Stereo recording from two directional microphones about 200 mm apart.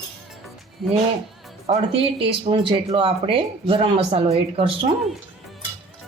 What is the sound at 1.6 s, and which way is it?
Speech, 30° right (ahead or behind).